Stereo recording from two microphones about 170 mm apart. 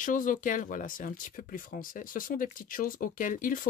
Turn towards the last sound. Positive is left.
turn(degrees=55)  # may be behind; listen again after turning